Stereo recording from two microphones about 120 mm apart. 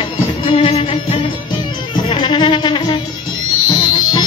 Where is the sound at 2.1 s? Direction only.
40° left (ahead or behind).